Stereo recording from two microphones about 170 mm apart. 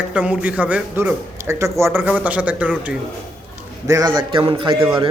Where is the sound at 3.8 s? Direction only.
20° right (ahead or behind).